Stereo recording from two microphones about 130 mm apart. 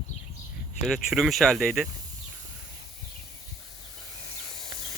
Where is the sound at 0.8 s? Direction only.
Centre (ahead or behind).